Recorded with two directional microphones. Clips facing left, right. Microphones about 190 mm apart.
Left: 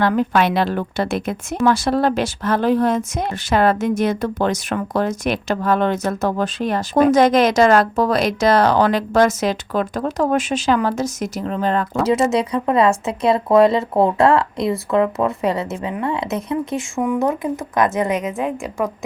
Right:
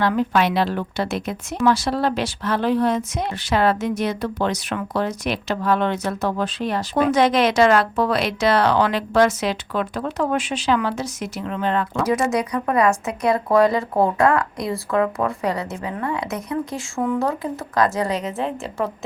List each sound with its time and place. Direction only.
0.0 s speech: 50° left (ahead or behind)
12.3 s speech: 25° left (ahead or behind)